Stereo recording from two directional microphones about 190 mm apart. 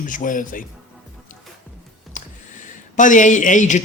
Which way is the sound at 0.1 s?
45° left (ahead or behind).